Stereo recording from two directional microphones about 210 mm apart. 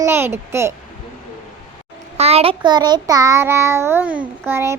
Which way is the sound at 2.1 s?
30° right (ahead or behind).